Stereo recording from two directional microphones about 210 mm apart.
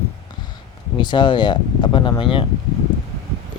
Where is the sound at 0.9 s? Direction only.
20° left (ahead or behind).